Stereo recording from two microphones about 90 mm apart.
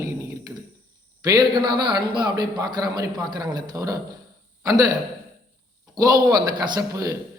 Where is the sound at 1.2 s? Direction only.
45° right (ahead or behind).